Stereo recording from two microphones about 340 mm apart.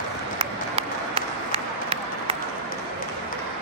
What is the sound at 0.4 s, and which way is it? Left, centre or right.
Run, centre.